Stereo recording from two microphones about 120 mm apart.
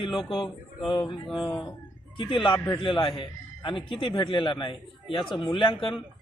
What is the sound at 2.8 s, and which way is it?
Speech, 45° left (ahead or behind).